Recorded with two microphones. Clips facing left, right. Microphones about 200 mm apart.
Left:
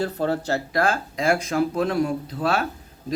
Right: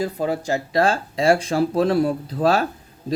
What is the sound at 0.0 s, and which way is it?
Speech, 10° right (ahead or behind).